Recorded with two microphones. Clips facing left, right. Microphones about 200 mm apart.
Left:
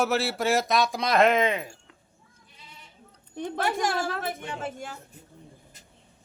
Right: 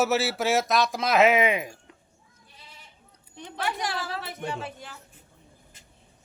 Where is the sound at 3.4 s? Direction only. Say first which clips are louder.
Left 4 dB; 50° left (ahead or behind).